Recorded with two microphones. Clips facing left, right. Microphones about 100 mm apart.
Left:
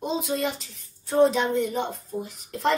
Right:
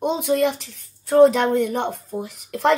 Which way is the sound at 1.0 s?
55° right (ahead or behind).